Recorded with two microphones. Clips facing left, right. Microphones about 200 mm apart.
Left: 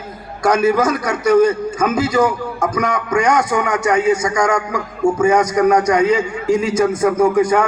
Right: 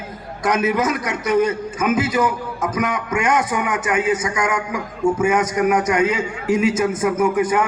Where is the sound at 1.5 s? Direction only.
5° right (ahead or behind).